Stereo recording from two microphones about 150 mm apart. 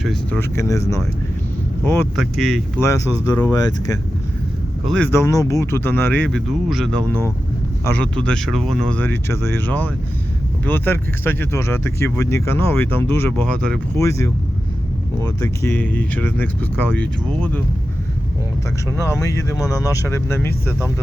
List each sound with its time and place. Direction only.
0.0 s speech: centre (ahead or behind)
0.3 s speech: 20° left (ahead or behind)
2.1 s speech: centre (ahead or behind)
2.7 s speech: 20° left (ahead or behind)
4.9 s speech: 10° left (ahead or behind)
14.0 s speech: 20° left (ahead or behind)
18.9 s speech: 20° left (ahead or behind)